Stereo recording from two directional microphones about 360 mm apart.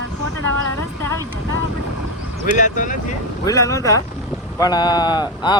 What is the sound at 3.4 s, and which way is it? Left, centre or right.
Speech, centre.